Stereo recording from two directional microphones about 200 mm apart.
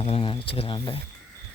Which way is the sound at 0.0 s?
30° left (ahead or behind).